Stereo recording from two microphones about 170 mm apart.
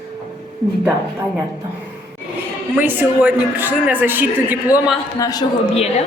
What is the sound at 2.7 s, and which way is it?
A woman's voice, 10° right (ahead or behind).